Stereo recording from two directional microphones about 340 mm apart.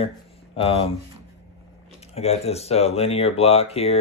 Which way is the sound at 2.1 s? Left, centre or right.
Centre.